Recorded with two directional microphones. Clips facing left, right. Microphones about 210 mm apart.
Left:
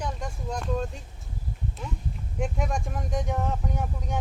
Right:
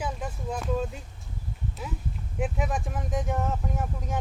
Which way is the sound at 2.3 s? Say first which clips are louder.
Even; 5° right (ahead or behind).